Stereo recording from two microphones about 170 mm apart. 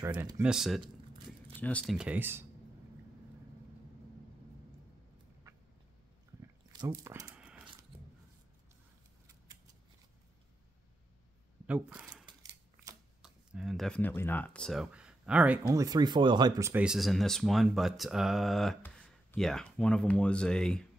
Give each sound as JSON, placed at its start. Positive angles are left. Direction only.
{"t": 0.4, "sound": "speech", "side_deg": -5}
{"t": 2.0, "sound": "speech", "side_deg": -10}
{"t": 7.0, "sound": "a sound", "side_deg": -20}
{"t": 11.6, "sound": "speech", "side_deg": -10}
{"t": 13.2, "sound": "speech", "side_deg": -5}
{"t": 15.7, "sound": "speech", "side_deg": -20}
{"t": 16.8, "sound": "speech", "side_deg": 0}